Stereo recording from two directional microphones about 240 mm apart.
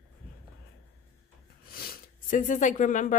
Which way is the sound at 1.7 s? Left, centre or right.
Left.